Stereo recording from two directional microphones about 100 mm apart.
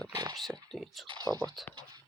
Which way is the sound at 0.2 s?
45° right (ahead or behind).